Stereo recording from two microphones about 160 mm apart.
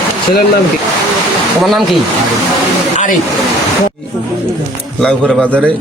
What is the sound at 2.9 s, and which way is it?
Speech, 55° left (ahead or behind).